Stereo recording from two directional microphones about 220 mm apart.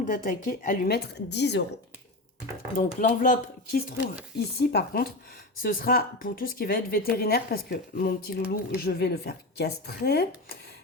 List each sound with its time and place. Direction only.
0.0 s a woman's voice: 40° left (ahead or behind)
3.0 s a woman's voice: 35° left (ahead or behind)